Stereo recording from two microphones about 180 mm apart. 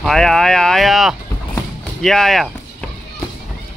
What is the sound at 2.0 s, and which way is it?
Speech, centre (ahead or behind).